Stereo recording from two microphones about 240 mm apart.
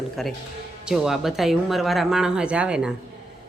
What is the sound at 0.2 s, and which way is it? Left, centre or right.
Speech, centre.